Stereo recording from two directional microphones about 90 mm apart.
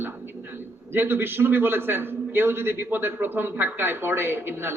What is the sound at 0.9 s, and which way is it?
A man's voice, 25° right (ahead or behind).